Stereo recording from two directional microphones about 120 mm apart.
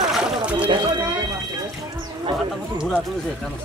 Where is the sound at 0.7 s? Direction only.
40° right (ahead or behind).